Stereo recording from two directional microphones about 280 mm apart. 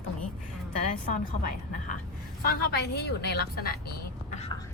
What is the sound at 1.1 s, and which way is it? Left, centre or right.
A woman's voice, left.